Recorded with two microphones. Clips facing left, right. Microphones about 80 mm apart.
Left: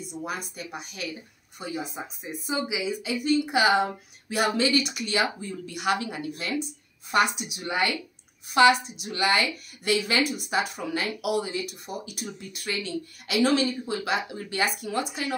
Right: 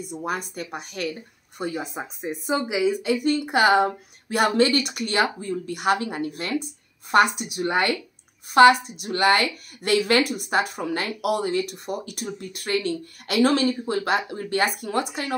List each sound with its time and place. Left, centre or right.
0.1 s speech: right